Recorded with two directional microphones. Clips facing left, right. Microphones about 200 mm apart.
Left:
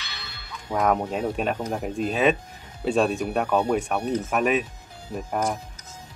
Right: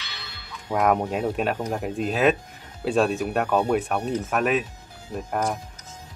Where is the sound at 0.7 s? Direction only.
5° right (ahead or behind).